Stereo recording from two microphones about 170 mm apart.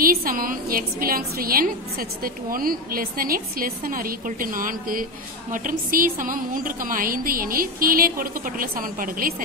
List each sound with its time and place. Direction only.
0.0 s a woman's voice: 55° right (ahead or behind)